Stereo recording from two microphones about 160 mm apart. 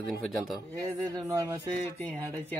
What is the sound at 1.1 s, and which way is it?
Speech, 20° right (ahead or behind).